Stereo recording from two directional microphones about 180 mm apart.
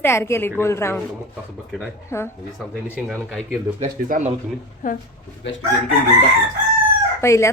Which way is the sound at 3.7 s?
40° right (ahead or behind).